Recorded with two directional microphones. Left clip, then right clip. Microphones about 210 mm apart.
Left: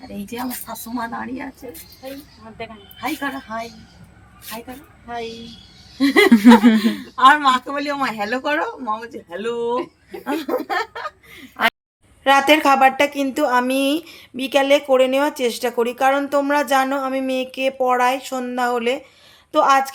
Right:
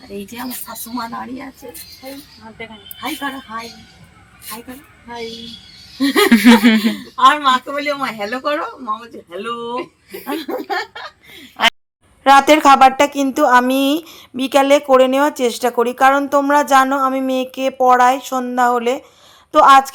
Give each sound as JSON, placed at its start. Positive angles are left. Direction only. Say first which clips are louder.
{"t": 3.0, "sound": "a woman's voice", "louder": "right 1 dB", "side_deg": -5}
{"t": 6.0, "sound": "speech", "louder": "right 1 dB", "side_deg": -5}
{"t": 12.2, "sound": "a woman's voice", "louder": "right 5 dB", "side_deg": -20}